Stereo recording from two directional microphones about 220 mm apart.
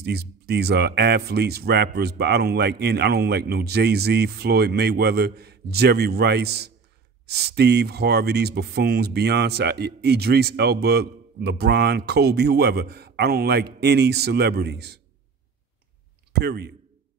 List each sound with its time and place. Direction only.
0.0 s speech: 45° right (ahead or behind)
16.3 s speech: 50° right (ahead or behind)